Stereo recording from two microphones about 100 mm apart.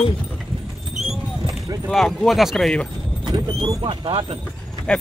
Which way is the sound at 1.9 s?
5° left (ahead or behind).